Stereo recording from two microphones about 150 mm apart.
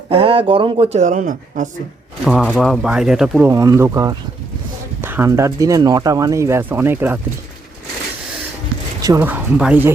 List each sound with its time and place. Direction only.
0.1 s speech: 40° right (ahead or behind); by 1.7 s 55° right (ahead or behind)
2.2 s speech: 5° right (ahead or behind)
3.4 s speech: 20° right (ahead or behind)
4.9 s a sound: 15° right (ahead or behind)
5.3 s speech: 25° right (ahead or behind)
9.0 s a sound: 25° right (ahead or behind)
9.2 s speech: 10° right (ahead or behind)